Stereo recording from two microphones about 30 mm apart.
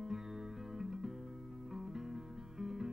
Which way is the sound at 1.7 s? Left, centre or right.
Centre.